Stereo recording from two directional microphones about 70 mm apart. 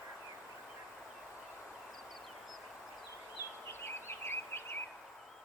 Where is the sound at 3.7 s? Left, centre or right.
Left.